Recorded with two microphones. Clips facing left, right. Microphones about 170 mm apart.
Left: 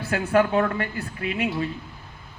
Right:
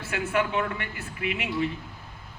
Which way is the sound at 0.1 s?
35° left (ahead or behind).